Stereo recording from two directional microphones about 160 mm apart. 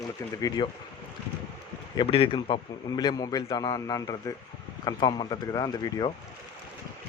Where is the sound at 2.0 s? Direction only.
30° left (ahead or behind).